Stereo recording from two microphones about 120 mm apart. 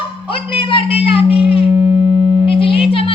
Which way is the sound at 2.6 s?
50° left (ahead or behind).